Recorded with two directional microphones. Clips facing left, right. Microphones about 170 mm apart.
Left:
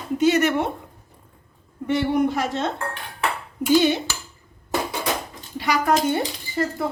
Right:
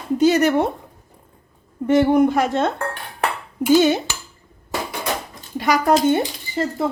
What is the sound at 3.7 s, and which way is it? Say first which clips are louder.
Speech: right 3 dB; 45° right (ahead or behind).